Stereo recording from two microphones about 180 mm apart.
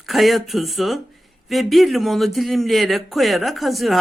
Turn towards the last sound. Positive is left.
turn(degrees=0)  # may be behind; listen again after turning